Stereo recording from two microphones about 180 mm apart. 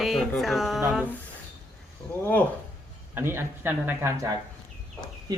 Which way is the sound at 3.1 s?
10° right (ahead or behind).